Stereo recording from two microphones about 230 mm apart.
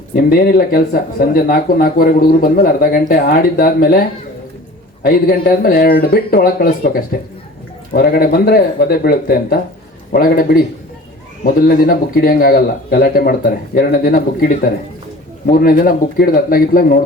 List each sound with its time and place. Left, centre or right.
0.1 s speech: left
15.4 s speech: left